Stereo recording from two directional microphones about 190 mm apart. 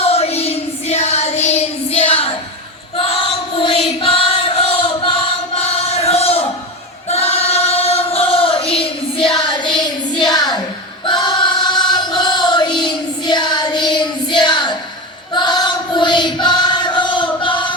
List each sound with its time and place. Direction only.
0.0 s child singing: 30° left (ahead or behind)
3.0 s choir: 30° left (ahead or behind)
5.5 s a sound: 35° left (ahead or behind)
7.1 s choir: 35° left (ahead or behind)
11.0 s choir: 25° left (ahead or behind)
12.8 s child singing: 25° left (ahead or behind)
15.3 s choir: 25° left (ahead or behind)